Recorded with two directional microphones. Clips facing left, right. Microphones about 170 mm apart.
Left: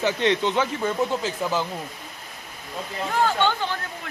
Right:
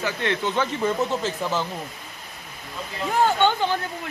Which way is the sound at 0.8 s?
Centre (ahead or behind).